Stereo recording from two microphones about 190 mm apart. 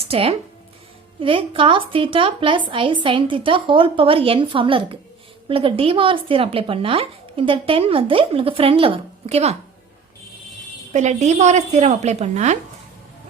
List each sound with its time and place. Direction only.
0.0 s speech: 30° right (ahead or behind)
10.9 s speech: 40° right (ahead or behind)